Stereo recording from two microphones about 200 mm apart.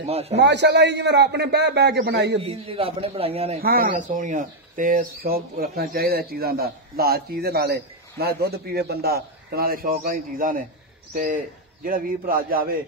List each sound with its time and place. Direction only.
0.0 s a man's voice: 30° right (ahead or behind)
0.4 s a man's voice: 60° right (ahead or behind)
2.4 s a man's voice: 30° right (ahead or behind)
3.6 s speech: 45° right (ahead or behind)